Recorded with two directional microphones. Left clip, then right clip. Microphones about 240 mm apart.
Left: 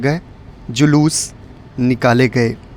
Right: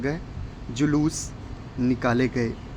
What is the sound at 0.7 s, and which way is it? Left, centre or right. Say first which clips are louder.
Speech: left 10 dB; left.